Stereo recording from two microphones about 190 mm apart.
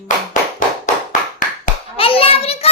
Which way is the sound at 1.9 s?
30° left (ahead or behind).